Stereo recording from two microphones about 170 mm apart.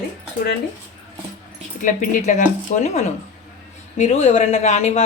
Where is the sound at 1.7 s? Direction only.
50° left (ahead or behind).